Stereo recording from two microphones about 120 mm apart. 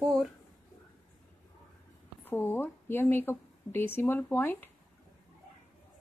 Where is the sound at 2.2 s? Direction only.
20° left (ahead or behind).